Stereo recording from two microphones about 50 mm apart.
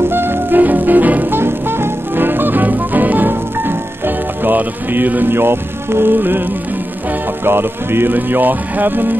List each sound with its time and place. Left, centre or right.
0.1 s music: right
1.3 s music: right
7.4 s speech: right